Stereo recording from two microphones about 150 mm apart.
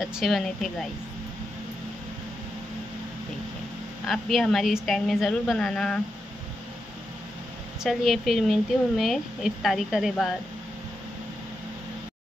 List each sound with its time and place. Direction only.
0.0 s a woman's voice: centre (ahead or behind)
4.1 s a woman's voice: centre (ahead or behind)
7.8 s a woman's voice: centre (ahead or behind)